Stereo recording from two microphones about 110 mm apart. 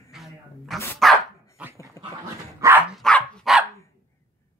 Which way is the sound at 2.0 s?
30° left (ahead or behind).